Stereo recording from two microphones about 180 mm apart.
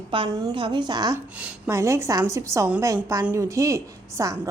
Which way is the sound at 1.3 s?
5° right (ahead or behind).